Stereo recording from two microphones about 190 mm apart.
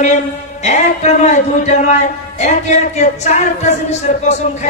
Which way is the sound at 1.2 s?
40° left (ahead or behind).